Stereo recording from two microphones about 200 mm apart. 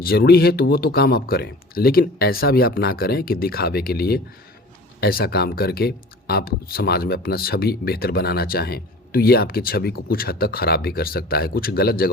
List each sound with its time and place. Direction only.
0.0 s speech: 50° left (ahead or behind)